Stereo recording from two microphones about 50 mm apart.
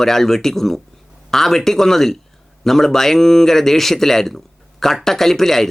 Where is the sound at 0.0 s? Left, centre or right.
Centre.